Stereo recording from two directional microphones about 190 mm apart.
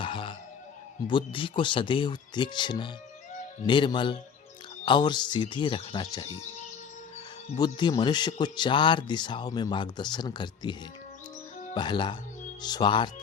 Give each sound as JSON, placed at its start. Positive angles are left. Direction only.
{"t": 0.0, "sound": "music", "side_deg": 25}
{"t": 1.0, "sound": "speech", "side_deg": 25}
{"t": 7.6, "sound": "speech", "side_deg": 25}